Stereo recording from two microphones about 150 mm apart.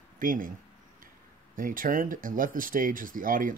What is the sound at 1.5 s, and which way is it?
Speech, 65° right (ahead or behind).